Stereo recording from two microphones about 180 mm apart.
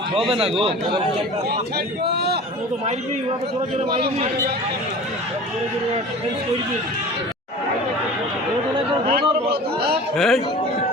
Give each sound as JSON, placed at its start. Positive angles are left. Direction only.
{"t": 0.3, "sound": "a man's voice", "side_deg": -30}
{"t": 2.0, "sound": "a man's voice", "side_deg": -65}
{"t": 9.0, "sound": "a sound", "side_deg": -60}
{"t": 10.2, "sound": "a man's voice", "side_deg": 0}